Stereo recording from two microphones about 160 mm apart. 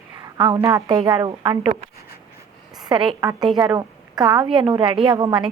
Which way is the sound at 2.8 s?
30° right (ahead or behind).